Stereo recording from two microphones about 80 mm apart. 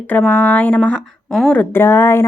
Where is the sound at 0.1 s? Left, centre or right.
Left.